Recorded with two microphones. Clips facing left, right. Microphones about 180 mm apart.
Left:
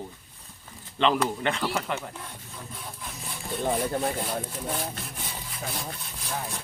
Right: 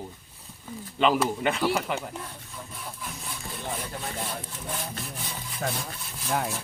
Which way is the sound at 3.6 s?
40° left (ahead or behind).